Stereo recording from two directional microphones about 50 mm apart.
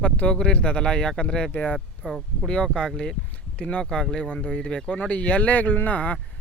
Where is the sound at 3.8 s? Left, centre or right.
Centre.